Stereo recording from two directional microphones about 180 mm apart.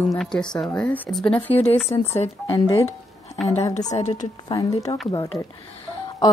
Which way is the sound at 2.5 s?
20° left (ahead or behind).